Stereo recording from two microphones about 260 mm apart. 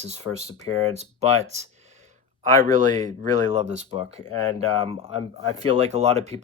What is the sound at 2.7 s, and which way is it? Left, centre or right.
Speech, right.